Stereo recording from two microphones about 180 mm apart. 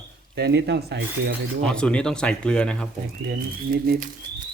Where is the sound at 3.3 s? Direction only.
55° right (ahead or behind).